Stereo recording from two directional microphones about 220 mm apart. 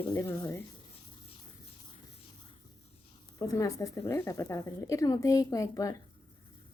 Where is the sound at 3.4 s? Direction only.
15° left (ahead or behind).